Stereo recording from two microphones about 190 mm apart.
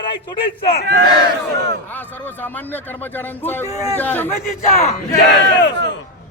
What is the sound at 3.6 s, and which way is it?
Speech, 15° right (ahead or behind).